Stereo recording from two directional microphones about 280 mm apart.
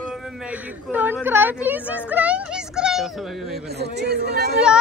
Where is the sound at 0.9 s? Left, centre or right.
Centre.